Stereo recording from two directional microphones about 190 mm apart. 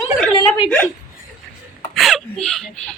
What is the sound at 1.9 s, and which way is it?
Speech, centre (ahead or behind).